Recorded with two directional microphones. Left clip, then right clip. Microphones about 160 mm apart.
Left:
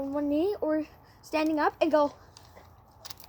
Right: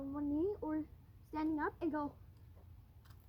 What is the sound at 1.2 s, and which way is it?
Speech, 15° right (ahead or behind).